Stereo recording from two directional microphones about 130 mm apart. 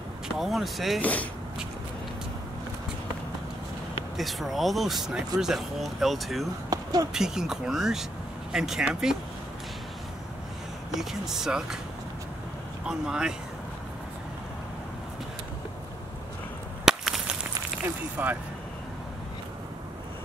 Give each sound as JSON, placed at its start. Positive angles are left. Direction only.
{"t": 0.4, "sound": "speech", "side_deg": 0}
{"t": 4.2, "sound": "speech", "side_deg": 0}
{"t": 6.7, "sound": "a sound", "side_deg": -30}
{"t": 7.2, "sound": "speech", "side_deg": -5}
{"t": 10.9, "sound": "speech", "side_deg": 0}
{"t": 12.8, "sound": "speech", "side_deg": -5}
{"t": 16.8, "sound": "whip", "side_deg": -5}
{"t": 17.8, "sound": "speech", "side_deg": -15}